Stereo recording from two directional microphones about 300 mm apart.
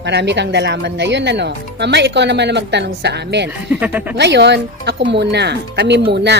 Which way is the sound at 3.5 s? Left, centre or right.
Centre.